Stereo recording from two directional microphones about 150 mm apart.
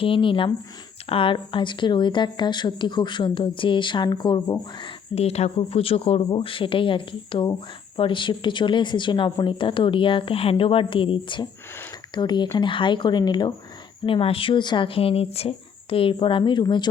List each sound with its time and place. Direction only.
0.0 s speech: 35° left (ahead or behind)